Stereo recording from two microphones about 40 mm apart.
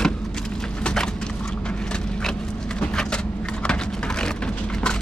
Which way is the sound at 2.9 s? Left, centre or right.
Centre.